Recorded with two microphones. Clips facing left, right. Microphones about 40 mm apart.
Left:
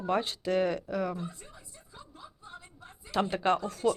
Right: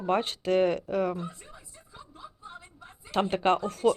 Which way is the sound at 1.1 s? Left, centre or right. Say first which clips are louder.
Right 2 dB; centre.